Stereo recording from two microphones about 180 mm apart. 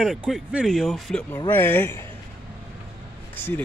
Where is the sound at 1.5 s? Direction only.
10° left (ahead or behind).